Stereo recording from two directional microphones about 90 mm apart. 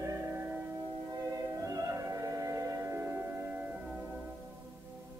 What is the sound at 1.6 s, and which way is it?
Music, 35° right (ahead or behind).